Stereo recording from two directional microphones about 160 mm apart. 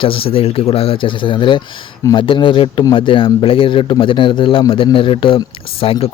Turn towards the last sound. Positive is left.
turn(degrees=35)  # may be behind; listen again after turning